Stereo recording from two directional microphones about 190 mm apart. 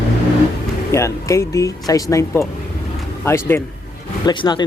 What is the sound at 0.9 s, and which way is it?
Speech, 15° left (ahead or behind).